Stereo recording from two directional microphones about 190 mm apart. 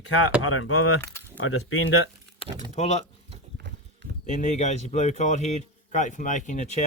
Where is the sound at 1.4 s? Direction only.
90° left.